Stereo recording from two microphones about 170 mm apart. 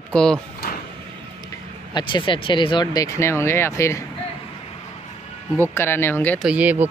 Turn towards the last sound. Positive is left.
turn(degrees=-10)  # may be behind; listen again after turning